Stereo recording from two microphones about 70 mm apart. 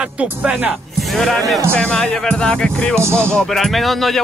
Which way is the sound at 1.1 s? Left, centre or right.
Centre.